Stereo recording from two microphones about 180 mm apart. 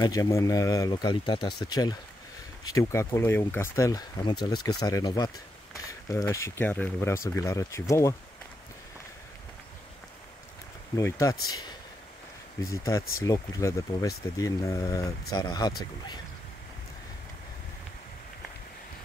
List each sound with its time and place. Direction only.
0.0 s speech: 20° left (ahead or behind)
11.0 s speech: 15° left (ahead or behind)
12.7 s speech: 15° left (ahead or behind)